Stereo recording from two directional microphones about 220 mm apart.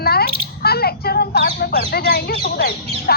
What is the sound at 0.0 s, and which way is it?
Bird, 45° left (ahead or behind).